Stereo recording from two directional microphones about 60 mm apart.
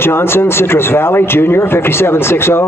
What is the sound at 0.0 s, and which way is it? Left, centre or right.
Speech, left.